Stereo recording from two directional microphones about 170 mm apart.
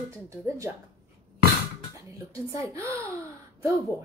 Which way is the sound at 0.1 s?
20° right (ahead or behind).